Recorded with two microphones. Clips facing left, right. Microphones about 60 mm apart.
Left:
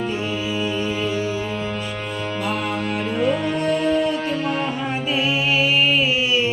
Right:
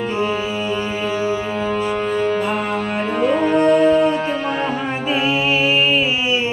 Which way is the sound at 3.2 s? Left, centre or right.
Right.